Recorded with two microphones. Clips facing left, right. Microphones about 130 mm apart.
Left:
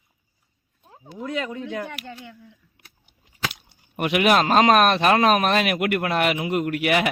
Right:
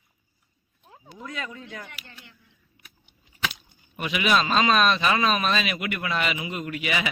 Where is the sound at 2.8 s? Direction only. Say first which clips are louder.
Left 1 dB; 90° left.